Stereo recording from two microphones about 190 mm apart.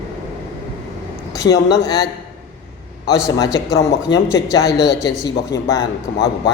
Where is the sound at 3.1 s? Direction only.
20° left (ahead or behind).